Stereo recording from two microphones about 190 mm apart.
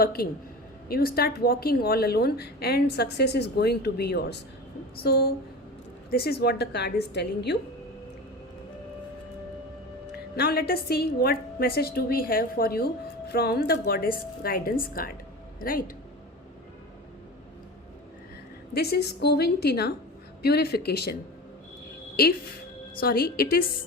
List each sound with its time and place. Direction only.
0.0 s a woman's voice: 50° left (ahead or behind)
10.3 s a woman's voice: 55° left (ahead or behind)
18.7 s a woman's voice: 55° left (ahead or behind)